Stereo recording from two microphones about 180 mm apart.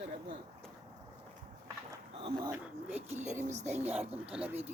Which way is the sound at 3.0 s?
40° right (ahead or behind).